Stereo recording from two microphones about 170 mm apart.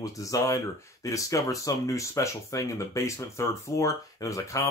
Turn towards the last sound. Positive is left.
turn(degrees=20)  # may be behind; listen again after turning